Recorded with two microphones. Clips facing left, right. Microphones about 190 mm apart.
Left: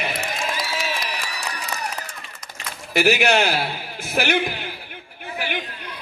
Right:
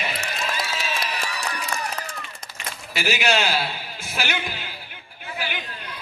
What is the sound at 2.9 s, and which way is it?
A man's voice, 60° left (ahead or behind).